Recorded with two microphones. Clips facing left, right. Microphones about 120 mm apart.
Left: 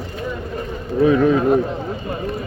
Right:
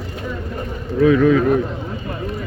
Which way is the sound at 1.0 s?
30° left (ahead or behind).